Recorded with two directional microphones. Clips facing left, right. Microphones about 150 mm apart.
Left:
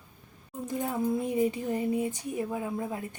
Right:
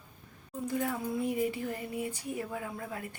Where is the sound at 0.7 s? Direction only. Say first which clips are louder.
Left 4 dB; 20° left (ahead or behind).